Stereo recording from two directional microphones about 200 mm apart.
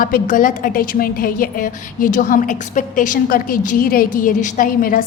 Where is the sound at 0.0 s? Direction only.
45° left (ahead or behind).